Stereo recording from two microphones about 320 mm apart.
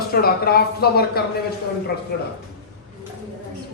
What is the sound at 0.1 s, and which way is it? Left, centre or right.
A man's voice, left.